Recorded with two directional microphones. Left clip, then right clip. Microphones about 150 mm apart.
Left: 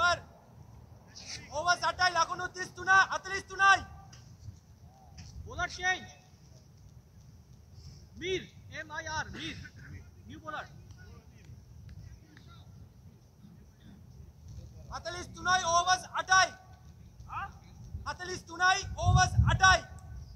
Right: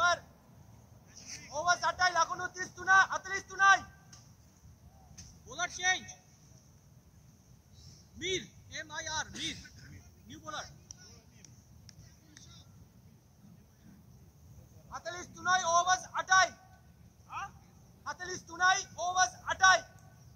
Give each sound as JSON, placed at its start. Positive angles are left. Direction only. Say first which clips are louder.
{"t": 1.1, "sound": "a sound", "louder": "left 4 dB", "side_deg": 25}
{"t": 1.5, "sound": "speech", "louder": "left 1 dB", "side_deg": 35}
{"t": 5.8, "sound": "a man's voice", "louder": "right 1 dB", "side_deg": 0}
{"t": 8.2, "sound": "a man's voice", "louder": "left 1 dB", "side_deg": 5}
{"t": 14.9, "sound": "a man's voice", "louder": "left 2 dB", "side_deg": 35}
{"t": 17.3, "sound": "a sound", "louder": "left 2 dB", "side_deg": -10}
{"t": 18.0, "sound": "a man's voice", "louder": "left 2 dB", "side_deg": 35}